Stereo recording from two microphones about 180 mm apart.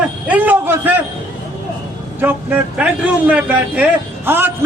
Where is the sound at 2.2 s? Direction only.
10° right (ahead or behind).